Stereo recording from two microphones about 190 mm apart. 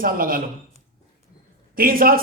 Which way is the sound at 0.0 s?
50° right (ahead or behind).